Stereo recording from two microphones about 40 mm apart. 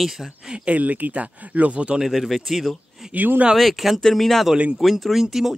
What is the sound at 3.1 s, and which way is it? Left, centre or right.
Speech, right.